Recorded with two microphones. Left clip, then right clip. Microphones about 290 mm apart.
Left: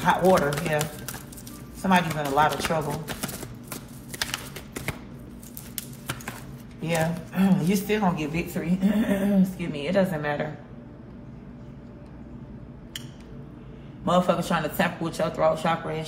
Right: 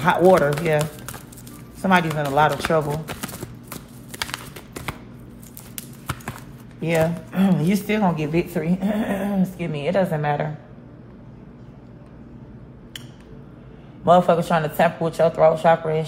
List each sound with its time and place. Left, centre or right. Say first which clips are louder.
0.0 s speech: right 5 dB; right
4.1 s a sound: right 1 dB; centre
6.8 s a man's voice: right 6 dB; right
14.0 s a man's voice: right 7 dB; right